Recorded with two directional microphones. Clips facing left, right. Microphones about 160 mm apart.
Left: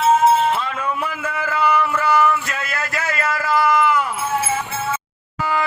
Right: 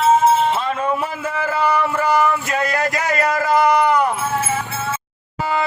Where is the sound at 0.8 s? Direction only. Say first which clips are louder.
Right 3 dB; 35° right (ahead or behind).